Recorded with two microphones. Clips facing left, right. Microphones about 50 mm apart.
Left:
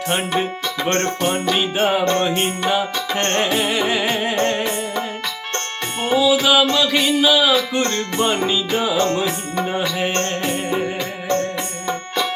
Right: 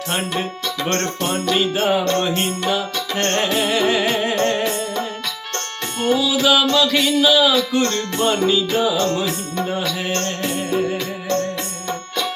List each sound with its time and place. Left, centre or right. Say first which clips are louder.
0.1 s speech: left 2 dB; centre
0.9 s music: left 2 dB; centre
7.7 s music: right 1 dB; left